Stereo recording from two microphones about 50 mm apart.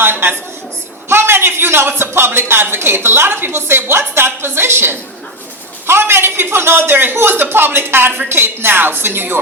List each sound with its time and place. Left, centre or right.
0.0 s a woman's voice: right